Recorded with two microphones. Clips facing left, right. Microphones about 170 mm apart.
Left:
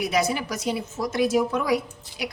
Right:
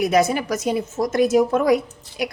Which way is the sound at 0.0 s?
50° right (ahead or behind).